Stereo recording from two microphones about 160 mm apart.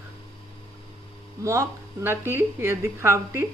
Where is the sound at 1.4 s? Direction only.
20° right (ahead or behind).